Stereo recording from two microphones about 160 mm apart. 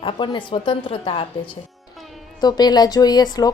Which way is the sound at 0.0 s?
35° left (ahead or behind).